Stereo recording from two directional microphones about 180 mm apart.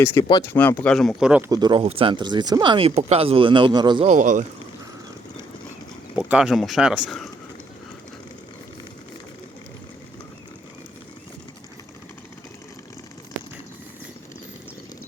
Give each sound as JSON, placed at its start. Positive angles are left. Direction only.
{"t": 0.0, "sound": "speech", "side_deg": 15}
{"t": 1.5, "sound": "speech", "side_deg": -25}
{"t": 4.0, "sound": "speech", "side_deg": -45}
{"t": 6.1, "sound": "speech", "side_deg": -5}